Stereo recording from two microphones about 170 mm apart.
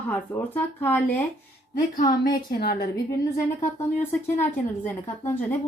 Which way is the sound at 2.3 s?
65° left (ahead or behind).